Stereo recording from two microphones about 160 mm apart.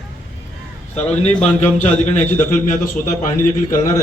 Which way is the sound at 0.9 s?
45° left (ahead or behind).